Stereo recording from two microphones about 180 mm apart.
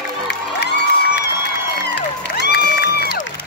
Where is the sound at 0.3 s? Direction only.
70° left (ahead or behind).